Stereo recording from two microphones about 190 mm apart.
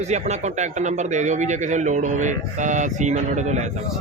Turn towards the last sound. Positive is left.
turn(degrees=-40)  # may be behind; listen again after turning